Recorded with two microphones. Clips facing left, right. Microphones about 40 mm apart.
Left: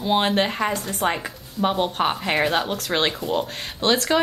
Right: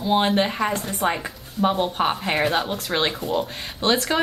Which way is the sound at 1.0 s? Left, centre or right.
Left.